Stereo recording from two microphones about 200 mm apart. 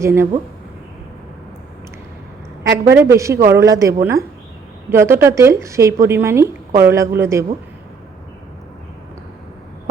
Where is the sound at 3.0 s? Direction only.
15° right (ahead or behind).